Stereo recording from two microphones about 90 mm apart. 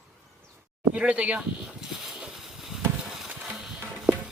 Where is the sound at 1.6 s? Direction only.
5° right (ahead or behind).